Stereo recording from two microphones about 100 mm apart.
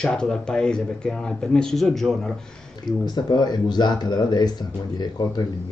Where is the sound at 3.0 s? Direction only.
45° left (ahead or behind).